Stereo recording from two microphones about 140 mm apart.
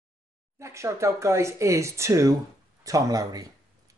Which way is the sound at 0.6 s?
20° right (ahead or behind).